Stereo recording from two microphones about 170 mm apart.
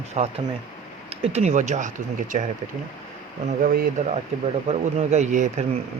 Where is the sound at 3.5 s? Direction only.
40° right (ahead or behind).